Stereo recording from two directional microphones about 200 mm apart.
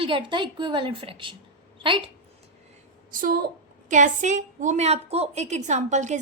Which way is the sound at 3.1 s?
45° right (ahead or behind).